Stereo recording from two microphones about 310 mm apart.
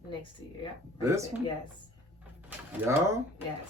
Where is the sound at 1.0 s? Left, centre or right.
Centre.